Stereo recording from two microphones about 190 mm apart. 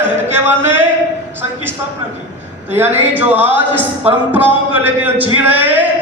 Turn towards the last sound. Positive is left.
turn(degrees=-10)  # may be behind; listen again after turning